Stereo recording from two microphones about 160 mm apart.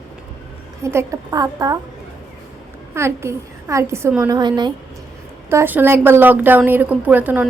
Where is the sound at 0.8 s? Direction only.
15° right (ahead or behind).